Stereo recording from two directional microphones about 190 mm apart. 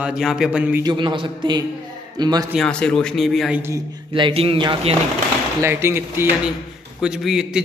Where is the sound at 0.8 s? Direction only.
25° right (ahead or behind).